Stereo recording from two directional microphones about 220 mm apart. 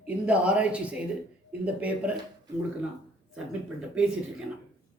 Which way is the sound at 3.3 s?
5° right (ahead or behind).